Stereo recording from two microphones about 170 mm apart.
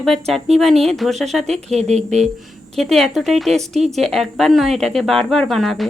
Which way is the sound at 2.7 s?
Centre (ahead or behind).